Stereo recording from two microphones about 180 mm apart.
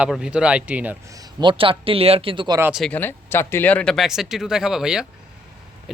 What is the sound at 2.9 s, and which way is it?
Speech, 10° left (ahead or behind).